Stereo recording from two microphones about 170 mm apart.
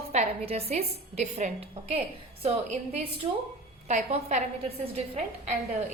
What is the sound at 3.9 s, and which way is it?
A woman's voice, 40° right (ahead or behind).